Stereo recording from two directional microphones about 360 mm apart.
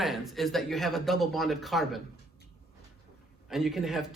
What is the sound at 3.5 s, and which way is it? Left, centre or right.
Speech, centre.